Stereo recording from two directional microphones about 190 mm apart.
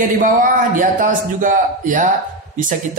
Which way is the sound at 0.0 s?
45° right (ahead or behind).